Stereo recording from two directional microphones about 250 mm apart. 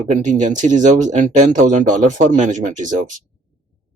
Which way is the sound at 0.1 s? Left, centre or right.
Right.